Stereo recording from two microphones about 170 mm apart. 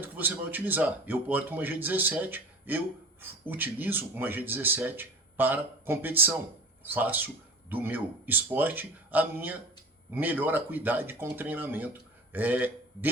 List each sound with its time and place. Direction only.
0.0 s a man's voice: 10° right (ahead or behind)